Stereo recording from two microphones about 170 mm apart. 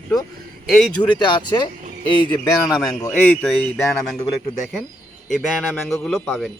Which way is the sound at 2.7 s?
5° left (ahead or behind).